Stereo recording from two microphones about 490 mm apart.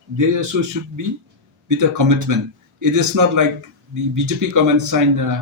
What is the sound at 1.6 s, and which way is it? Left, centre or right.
A man's voice, right.